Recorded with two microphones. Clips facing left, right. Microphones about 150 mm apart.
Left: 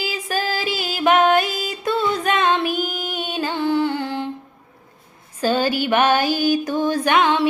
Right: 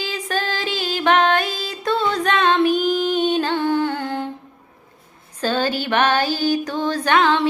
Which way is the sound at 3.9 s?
50° right (ahead or behind).